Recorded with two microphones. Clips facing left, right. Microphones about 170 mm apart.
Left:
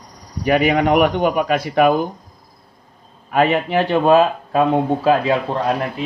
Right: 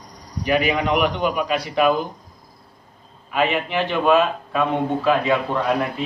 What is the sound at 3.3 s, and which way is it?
Speech, 40° left (ahead or behind).